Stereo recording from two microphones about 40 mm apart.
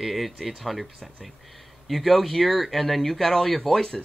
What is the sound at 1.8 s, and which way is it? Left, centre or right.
Speech, centre.